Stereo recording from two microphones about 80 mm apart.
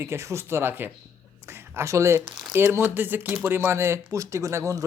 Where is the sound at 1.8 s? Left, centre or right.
Right.